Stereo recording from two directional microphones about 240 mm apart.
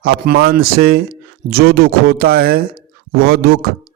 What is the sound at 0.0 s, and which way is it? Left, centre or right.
Speech, right.